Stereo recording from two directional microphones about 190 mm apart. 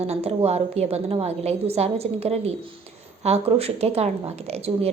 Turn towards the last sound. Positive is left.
turn(degrees=-30)  # may be behind; listen again after turning